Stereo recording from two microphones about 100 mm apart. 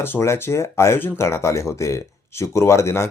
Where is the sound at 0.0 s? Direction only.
25° left (ahead or behind).